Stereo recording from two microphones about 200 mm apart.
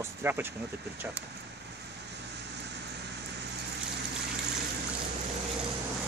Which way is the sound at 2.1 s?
60° right (ahead or behind).